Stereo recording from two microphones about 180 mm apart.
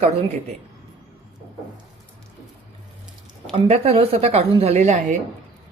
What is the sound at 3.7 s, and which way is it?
A woman's voice, 35° right (ahead or behind).